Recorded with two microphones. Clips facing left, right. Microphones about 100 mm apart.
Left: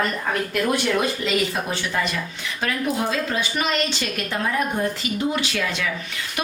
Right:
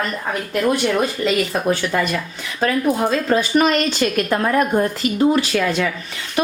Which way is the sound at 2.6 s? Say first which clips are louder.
Right 6 dB; 40° right (ahead or behind).